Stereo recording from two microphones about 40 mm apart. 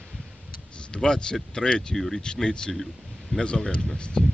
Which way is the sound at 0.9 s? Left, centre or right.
Centre.